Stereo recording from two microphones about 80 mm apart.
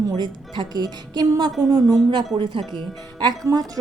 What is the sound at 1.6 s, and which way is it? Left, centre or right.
Speech, right.